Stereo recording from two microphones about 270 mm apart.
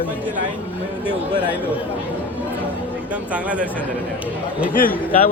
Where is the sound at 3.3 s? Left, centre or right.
Centre.